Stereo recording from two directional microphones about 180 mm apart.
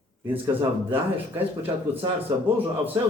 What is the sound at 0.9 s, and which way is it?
Speech, 10° right (ahead or behind).